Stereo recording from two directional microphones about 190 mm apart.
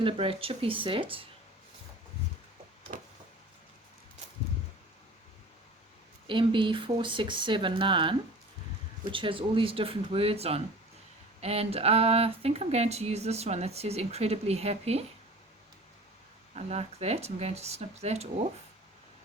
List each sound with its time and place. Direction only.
0.0 s speech: 30° right (ahead or behind)
2.9 s a sound: 50° right (ahead or behind)
6.2 s speech: 25° right (ahead or behind)
16.6 s speech: 35° right (ahead or behind)